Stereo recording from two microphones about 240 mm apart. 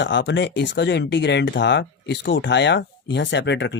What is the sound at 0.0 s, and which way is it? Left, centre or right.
Speech, left.